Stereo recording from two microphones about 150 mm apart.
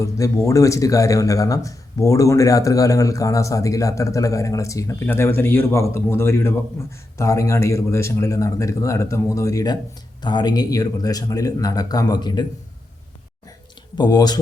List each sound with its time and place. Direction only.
0.0 s speech: 20° left (ahead or behind)
13.9 s speech: 30° left (ahead or behind)